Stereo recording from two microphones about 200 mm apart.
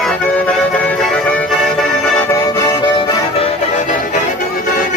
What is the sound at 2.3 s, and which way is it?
Music, 15° left (ahead or behind).